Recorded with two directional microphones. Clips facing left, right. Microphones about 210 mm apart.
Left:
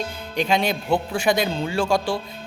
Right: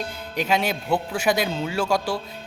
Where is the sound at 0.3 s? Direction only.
5° right (ahead or behind).